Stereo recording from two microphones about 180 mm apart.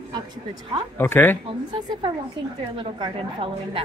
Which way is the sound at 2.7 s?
30° right (ahead or behind).